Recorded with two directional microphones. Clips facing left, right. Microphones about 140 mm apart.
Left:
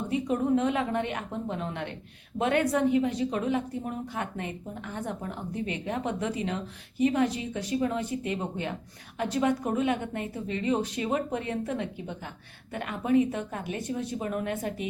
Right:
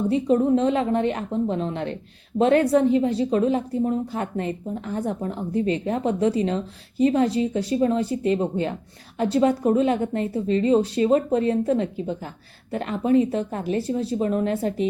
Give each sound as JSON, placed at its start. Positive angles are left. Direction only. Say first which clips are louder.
{"t": 0.1, "sound": "speech", "louder": "right 5 dB", "side_deg": -30}